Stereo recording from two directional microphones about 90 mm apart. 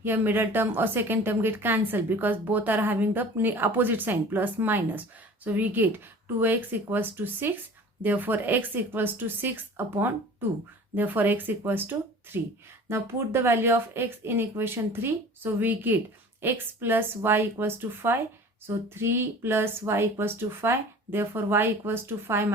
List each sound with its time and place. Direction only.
0.0 s a woman's voice: 25° right (ahead or behind)